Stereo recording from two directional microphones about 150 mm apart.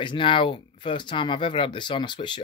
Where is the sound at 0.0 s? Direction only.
35° left (ahead or behind).